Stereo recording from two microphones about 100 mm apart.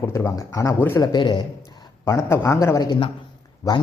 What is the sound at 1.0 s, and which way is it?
Speech, 50° left (ahead or behind).